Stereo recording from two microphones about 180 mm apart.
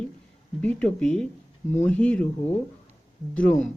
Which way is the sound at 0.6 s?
5° left (ahead or behind).